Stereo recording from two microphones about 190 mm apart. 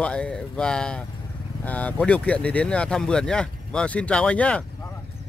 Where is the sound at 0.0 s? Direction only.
5° left (ahead or behind).